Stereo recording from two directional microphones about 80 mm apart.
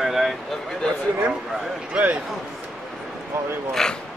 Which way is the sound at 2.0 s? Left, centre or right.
Centre.